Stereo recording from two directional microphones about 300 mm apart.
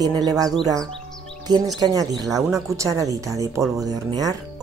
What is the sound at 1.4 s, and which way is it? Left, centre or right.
Speech, centre.